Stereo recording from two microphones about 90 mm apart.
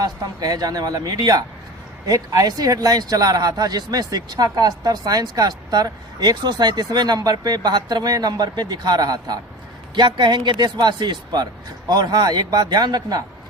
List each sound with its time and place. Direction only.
0.0 s speech: 45° right (ahead or behind)